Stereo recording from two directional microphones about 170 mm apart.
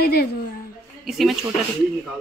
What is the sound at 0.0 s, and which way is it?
Speech, 65° left (ahead or behind).